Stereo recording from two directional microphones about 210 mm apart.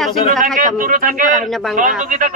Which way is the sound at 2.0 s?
40° right (ahead or behind).